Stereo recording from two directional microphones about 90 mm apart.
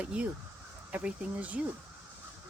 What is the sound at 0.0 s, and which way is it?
Speech, 15° right (ahead or behind).